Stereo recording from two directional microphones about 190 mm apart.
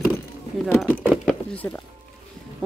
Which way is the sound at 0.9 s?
10° right (ahead or behind).